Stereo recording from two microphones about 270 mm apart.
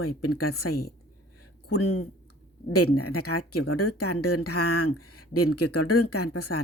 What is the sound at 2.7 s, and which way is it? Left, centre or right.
Speech, left.